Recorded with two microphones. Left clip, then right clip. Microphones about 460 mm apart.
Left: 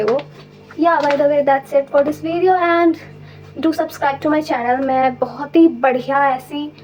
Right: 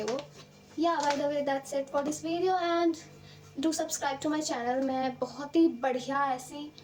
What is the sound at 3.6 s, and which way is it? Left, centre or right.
A woman's voice, right.